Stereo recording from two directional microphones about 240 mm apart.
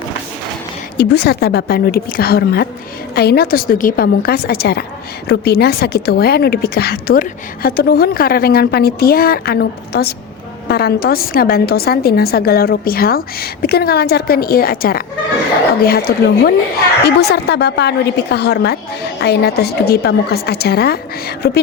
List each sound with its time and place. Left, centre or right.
0.9 s a woman's voice: left